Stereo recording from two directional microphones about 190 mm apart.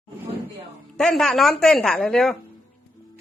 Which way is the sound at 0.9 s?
Centre (ahead or behind).